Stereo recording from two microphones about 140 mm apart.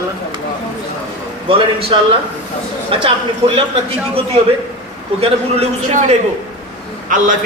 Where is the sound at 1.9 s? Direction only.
35° right (ahead or behind).